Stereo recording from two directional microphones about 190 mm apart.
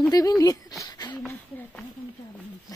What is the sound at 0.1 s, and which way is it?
Speech, 20° left (ahead or behind).